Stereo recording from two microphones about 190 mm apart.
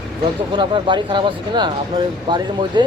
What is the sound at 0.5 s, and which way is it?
Speech, 25° right (ahead or behind).